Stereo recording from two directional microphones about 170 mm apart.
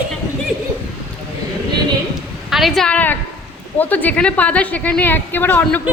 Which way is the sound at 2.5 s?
Centre (ahead or behind).